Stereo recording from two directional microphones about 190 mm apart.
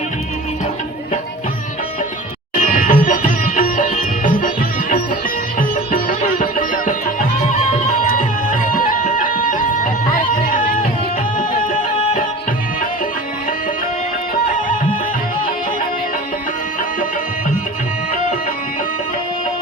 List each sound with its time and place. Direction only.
2.6 s music: 45° left (ahead or behind)